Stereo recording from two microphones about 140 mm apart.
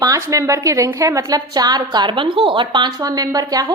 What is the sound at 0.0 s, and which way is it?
A woman's voice, 25° right (ahead or behind).